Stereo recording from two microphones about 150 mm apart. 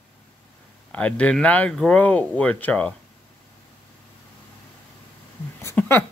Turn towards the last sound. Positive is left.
turn(degrees=15)  # may be behind; listen again after turning